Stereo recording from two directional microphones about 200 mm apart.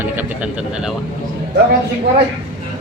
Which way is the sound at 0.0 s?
10° right (ahead or behind).